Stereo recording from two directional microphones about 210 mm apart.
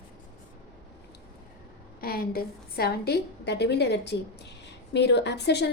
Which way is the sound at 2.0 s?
45° left (ahead or behind).